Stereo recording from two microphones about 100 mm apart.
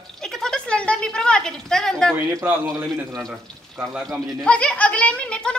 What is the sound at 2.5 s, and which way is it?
Speech, 20° right (ahead or behind).